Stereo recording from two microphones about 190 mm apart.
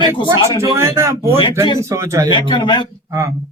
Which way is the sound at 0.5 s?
15° right (ahead or behind).